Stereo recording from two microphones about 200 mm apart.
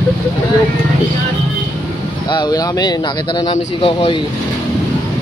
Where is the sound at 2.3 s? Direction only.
20° left (ahead or behind).